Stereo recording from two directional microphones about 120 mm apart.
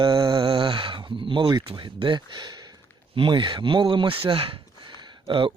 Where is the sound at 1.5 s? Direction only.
40° right (ahead or behind).